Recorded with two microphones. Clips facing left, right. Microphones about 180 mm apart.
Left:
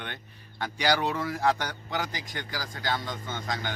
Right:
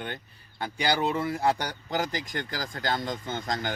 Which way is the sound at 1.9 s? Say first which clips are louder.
Right 6 dB; 45° right (ahead or behind).